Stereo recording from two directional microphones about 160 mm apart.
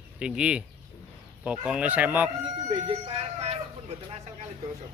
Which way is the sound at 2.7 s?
35° right (ahead or behind).